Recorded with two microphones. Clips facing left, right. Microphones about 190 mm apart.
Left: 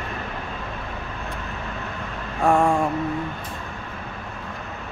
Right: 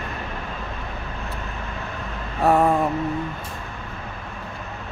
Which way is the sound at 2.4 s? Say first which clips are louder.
Right 1 dB; 5° right (ahead or behind).